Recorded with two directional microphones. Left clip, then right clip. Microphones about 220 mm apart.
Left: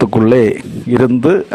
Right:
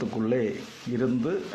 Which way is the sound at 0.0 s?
45° left (ahead or behind).